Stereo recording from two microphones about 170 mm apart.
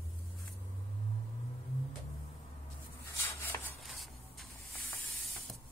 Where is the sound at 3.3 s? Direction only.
15° left (ahead or behind).